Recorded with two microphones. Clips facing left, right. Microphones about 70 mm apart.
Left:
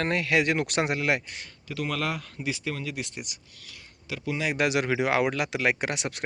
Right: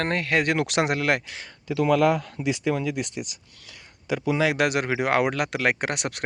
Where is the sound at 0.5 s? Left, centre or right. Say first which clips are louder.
Right 3 dB; right.